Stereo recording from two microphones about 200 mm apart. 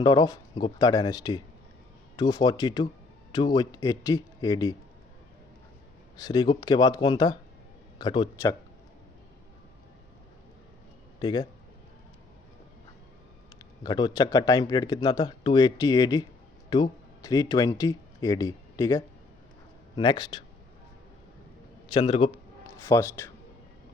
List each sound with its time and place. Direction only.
0.0 s speech: 20° left (ahead or behind)
6.1 s speech: 20° left (ahead or behind)
11.2 s speech: 20° left (ahead or behind)
13.6 s speech: 20° left (ahead or behind)
21.9 s speech: 25° left (ahead or behind)
22.8 s speech: 15° left (ahead or behind)